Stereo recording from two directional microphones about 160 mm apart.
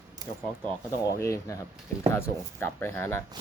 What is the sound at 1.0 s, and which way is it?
Speech, 20° left (ahead or behind).